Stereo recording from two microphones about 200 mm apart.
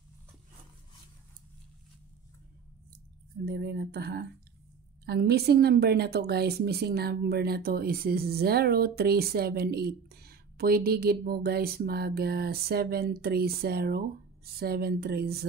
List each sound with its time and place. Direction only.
3.4 s a woman's voice: 50° right (ahead or behind)